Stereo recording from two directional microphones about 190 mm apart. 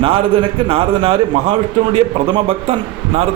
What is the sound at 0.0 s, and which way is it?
A man's voice, 30° right (ahead or behind).